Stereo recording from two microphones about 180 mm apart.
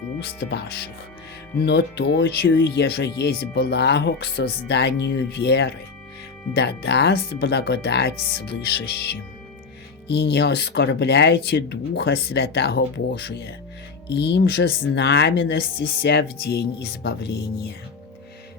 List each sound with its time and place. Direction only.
0.2 s speech: 65° left (ahead or behind)
10.1 s speech: 65° left (ahead or behind)
14.1 s speech: 70° left (ahead or behind)